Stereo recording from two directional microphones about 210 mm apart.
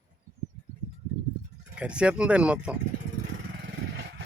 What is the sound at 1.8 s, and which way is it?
Speech, 5° right (ahead or behind).